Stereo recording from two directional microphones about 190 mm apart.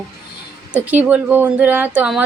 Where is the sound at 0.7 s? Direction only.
10° right (ahead or behind).